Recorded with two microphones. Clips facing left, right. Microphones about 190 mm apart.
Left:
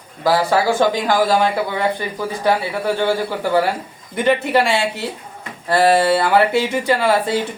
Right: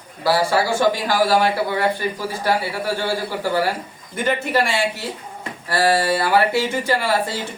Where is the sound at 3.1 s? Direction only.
20° left (ahead or behind).